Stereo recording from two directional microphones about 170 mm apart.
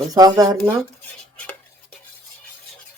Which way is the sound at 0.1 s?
20° right (ahead or behind).